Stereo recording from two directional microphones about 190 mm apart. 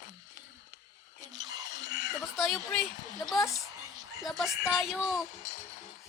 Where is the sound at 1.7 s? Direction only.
75° left (ahead or behind).